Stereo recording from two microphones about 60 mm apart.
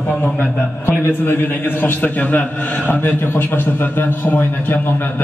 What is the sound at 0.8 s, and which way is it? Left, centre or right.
A man's voice, left.